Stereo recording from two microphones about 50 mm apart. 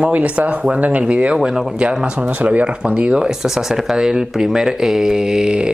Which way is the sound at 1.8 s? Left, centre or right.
Right.